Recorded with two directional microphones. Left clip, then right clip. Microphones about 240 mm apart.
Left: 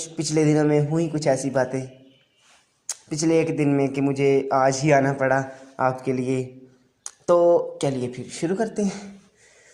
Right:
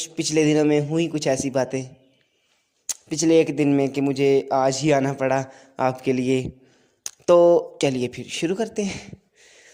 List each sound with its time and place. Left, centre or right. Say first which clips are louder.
0.0 s speech: right 1 dB; right
2.8 s a sound: right 2 dB; right
3.5 s speech: right 1 dB; right